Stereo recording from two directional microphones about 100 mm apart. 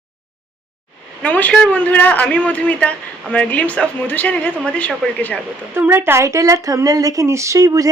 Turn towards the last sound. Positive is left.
turn(degrees=-35)  # may be behind; listen again after turning